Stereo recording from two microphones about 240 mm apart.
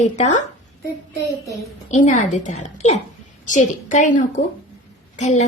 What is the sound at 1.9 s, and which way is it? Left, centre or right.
A woman's voice, left.